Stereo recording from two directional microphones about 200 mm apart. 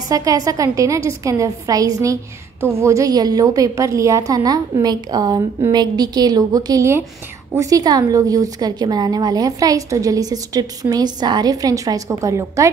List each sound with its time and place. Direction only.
0.1 s a woman's voice: 15° right (ahead or behind)